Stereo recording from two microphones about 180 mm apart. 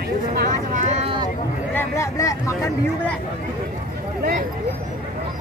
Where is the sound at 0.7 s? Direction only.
40° right (ahead or behind).